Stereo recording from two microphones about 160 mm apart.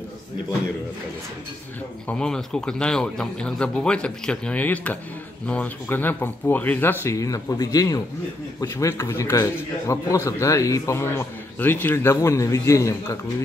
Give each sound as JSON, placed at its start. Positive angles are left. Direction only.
{"t": 2.0, "sound": "a man's voice", "side_deg": 5}